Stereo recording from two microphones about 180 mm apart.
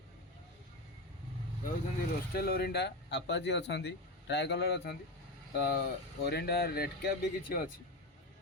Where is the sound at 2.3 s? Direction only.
60° left (ahead or behind).